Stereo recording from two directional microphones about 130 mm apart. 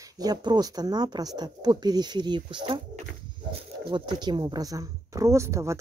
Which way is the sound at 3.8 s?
35° right (ahead or behind).